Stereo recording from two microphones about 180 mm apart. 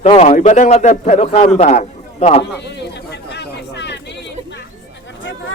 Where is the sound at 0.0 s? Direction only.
35° left (ahead or behind).